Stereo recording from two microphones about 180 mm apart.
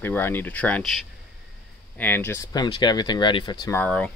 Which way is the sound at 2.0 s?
10° left (ahead or behind).